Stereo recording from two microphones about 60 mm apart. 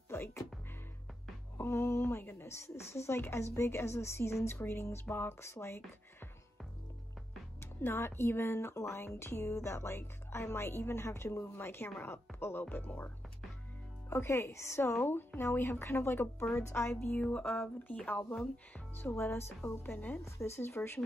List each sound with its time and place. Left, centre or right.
0.1 s music: left
1.6 s speech: left
7.6 s speech: left
11.5 s a woman's voice: left
14.0 s speech: left
17.2 s a sound: centre
19.0 s a woman's voice: left
20.2 s speech: left